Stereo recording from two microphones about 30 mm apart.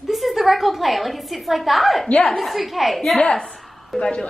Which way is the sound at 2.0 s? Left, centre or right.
Left.